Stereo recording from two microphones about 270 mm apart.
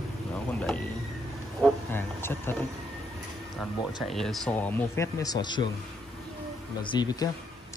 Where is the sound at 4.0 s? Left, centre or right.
Centre.